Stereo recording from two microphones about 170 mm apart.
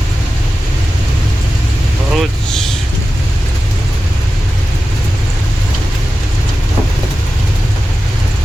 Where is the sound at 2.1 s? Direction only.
Centre (ahead or behind).